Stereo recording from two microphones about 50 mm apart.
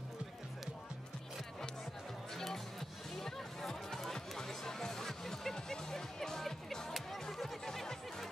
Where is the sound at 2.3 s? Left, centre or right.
Centre.